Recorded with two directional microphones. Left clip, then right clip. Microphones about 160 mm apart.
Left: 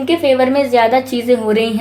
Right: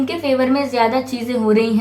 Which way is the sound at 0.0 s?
40° left (ahead or behind).